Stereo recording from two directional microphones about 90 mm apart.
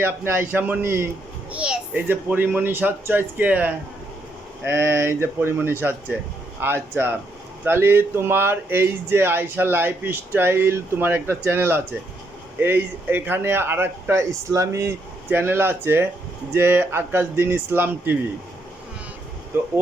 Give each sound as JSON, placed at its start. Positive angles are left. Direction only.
{"t": 0.0, "sound": "speech", "side_deg": -25}
{"t": 1.5, "sound": "a child's voice", "side_deg": -10}
{"t": 2.0, "sound": "speech", "side_deg": -25}